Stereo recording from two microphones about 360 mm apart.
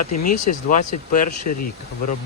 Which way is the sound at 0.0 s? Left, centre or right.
Left.